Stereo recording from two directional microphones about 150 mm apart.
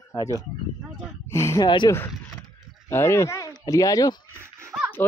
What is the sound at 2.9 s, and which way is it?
Speech, 15° left (ahead or behind).